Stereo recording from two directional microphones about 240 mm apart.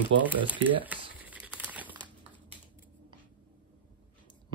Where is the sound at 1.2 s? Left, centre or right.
Centre.